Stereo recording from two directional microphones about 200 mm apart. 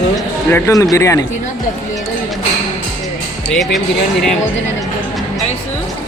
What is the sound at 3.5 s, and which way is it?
Speech, centre (ahead or behind).